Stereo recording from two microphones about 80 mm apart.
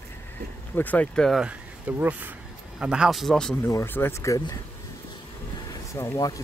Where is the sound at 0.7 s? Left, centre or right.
Left.